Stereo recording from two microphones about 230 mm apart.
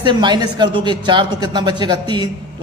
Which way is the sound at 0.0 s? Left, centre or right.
Centre.